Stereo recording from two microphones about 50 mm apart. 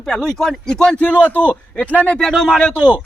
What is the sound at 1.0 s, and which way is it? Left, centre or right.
Speech, left.